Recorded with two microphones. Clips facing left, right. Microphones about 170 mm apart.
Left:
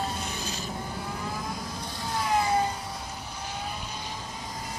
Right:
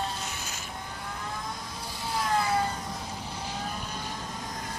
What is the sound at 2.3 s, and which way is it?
Vehicle, 20° left (ahead or behind).